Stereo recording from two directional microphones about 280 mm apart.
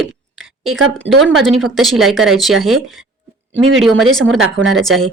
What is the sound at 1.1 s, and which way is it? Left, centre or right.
Speech, centre.